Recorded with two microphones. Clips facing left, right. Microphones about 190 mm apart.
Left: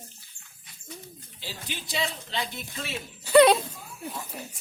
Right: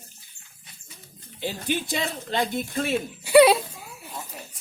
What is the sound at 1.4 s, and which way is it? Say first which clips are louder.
Speech: right 12 dB; 55° right (ahead or behind).